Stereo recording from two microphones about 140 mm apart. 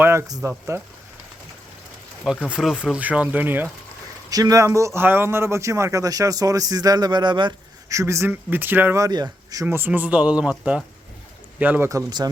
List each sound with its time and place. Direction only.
0.0 s a man's voice: 20° right (ahead or behind)
2.2 s speech: 5° right (ahead or behind)
4.3 s a man's voice: 25° right (ahead or behind)
7.9 s speech: 20° right (ahead or behind)
11.9 s a man's voice: 25° right (ahead or behind)